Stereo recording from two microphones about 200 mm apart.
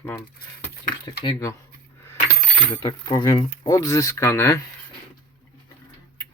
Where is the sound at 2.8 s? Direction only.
20° left (ahead or behind).